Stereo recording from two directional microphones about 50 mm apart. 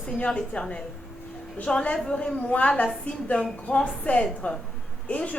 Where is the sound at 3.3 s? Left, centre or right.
Centre.